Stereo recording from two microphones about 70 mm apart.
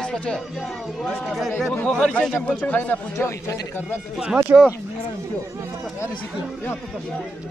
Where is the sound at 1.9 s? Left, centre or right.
Centre.